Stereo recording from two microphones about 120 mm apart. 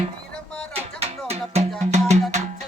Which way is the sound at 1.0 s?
60° right (ahead or behind).